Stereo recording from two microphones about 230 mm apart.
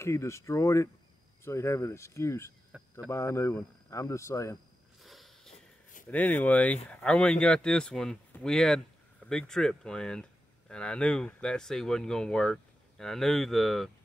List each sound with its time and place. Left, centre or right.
0.0 s speech: centre
2.7 s cricket: centre
3.1 s speech: centre
5.0 s a sound: centre
5.5 s a sound: left
6.0 s speech: centre